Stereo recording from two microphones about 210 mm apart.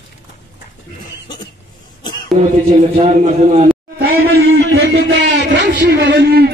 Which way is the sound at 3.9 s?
50° right (ahead or behind).